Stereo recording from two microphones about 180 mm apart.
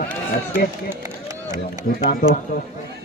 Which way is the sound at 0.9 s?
15° right (ahead or behind).